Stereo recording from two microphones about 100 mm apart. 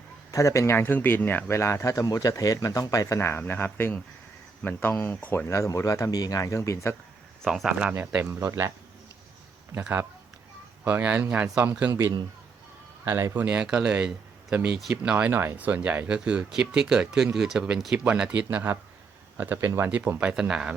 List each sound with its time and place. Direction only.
0.3 s speech: 35° left (ahead or behind)
3.2 s speech: 25° left (ahead or behind)
5.5 s speech: 30° left (ahead or behind)
7.4 s speech: 5° right (ahead or behind)
8.4 s speech: 25° right (ahead or behind)
10.8 s speech: 15° right (ahead or behind)
13.1 s speech: 30° right (ahead or behind)
13.3 s speech: 15° right (ahead or behind)
15.1 s speech: 20° right (ahead or behind)
20.3 s speech: 10° right (ahead or behind)